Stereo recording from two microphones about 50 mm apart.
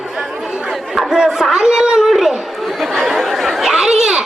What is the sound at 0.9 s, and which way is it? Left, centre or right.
Chatter, centre.